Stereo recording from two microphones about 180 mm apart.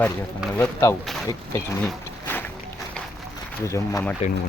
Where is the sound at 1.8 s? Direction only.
5° left (ahead or behind).